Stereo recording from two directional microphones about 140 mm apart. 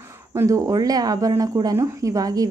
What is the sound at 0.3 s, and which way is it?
Speech, 20° right (ahead or behind).